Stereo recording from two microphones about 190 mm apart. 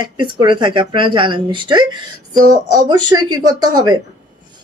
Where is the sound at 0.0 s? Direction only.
25° right (ahead or behind).